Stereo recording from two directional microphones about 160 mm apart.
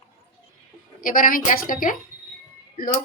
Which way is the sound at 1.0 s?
60° left (ahead or behind).